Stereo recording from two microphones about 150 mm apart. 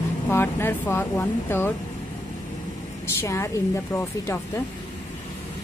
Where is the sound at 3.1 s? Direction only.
20° left (ahead or behind).